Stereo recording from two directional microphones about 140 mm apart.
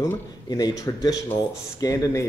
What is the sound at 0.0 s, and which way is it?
Speech, 25° left (ahead or behind).